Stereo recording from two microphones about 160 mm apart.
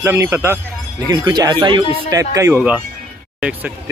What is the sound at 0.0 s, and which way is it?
Speech, 15° right (ahead or behind).